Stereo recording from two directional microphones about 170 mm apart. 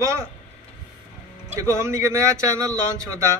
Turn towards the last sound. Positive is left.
turn(degrees=-15)  # may be behind; listen again after turning